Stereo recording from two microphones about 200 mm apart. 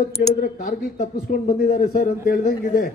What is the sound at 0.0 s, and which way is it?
A man's voice, 45° left (ahead or behind).